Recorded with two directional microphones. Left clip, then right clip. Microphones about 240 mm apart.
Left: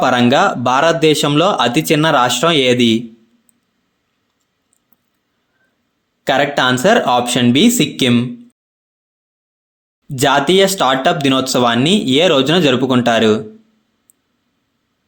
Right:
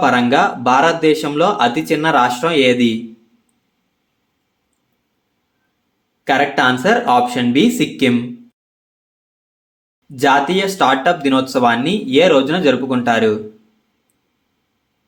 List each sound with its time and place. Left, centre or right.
0.3 s speech: left
6.5 s speech: left
10.2 s speech: left